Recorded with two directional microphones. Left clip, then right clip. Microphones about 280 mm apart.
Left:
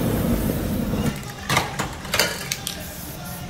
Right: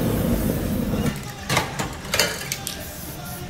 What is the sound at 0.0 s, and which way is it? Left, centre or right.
Vehicle, left.